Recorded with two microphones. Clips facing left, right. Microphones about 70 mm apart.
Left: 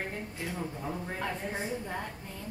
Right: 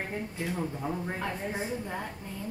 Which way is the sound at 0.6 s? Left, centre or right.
Centre.